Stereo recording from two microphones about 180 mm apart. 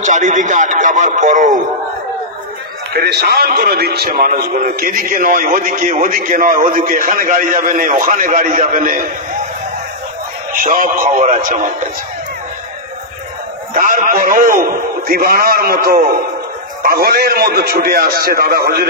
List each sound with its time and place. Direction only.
0.0 s speech: 45° right (ahead or behind)
2.9 s speech: 65° right (ahead or behind); by 9.0 s 50° right (ahead or behind)
10.5 s speech: 50° right (ahead or behind)
13.7 s a man's voice: 50° right (ahead or behind)